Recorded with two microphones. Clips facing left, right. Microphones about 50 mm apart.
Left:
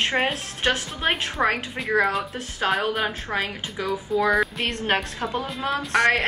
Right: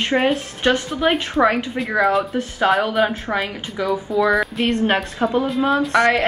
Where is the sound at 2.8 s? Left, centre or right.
Centre.